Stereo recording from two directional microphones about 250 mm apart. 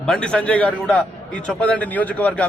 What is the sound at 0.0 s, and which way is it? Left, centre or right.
A man's voice, centre.